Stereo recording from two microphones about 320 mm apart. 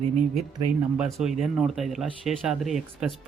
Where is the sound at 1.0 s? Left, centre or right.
Centre.